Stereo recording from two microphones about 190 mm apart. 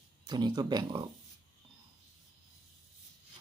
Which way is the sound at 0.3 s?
20° right (ahead or behind).